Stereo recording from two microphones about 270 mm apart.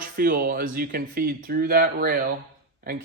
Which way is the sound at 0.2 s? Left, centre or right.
Right.